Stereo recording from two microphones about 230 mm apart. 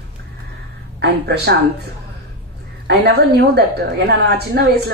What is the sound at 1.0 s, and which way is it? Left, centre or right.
Speech, right.